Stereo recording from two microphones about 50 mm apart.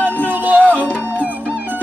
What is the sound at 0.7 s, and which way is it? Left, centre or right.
Music, left.